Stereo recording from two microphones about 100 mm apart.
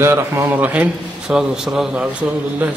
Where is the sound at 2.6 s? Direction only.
15° right (ahead or behind).